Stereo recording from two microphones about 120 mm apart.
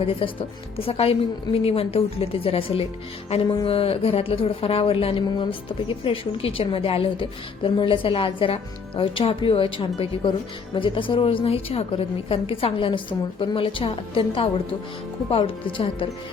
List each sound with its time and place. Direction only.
0.0 s speech: 50° left (ahead or behind)